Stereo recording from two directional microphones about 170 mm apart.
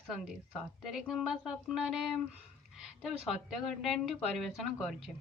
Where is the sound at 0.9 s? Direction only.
Centre (ahead or behind).